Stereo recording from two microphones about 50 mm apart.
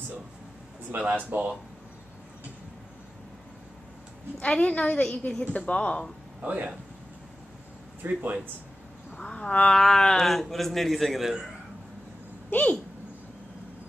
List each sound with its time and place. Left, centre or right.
0.9 s speech: right
4.4 s a woman's voice: left
6.4 s speech: right
8.0 s speech: right
9.1 s cat: centre
9.7 s speech: centre
12.4 s speech: left